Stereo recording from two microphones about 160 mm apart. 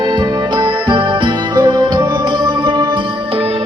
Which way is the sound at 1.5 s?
30° right (ahead or behind).